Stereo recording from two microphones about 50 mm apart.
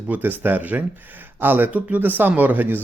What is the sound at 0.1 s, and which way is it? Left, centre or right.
Speech, right.